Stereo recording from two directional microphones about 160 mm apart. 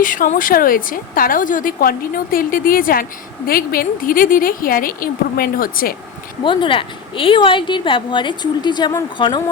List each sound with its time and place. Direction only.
0.0 s a woman's voice: 55° left (ahead or behind)
6.4 s a woman's voice: 30° left (ahead or behind)